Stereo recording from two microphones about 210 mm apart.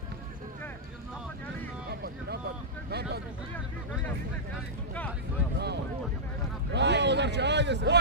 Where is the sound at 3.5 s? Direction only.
10° left (ahead or behind).